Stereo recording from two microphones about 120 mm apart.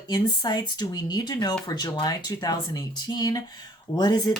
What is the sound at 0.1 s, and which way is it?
Speech, 35° left (ahead or behind).